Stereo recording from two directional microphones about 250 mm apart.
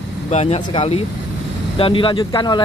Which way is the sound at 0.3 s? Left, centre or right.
Left.